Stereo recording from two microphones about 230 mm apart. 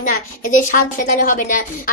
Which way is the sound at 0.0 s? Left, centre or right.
Left.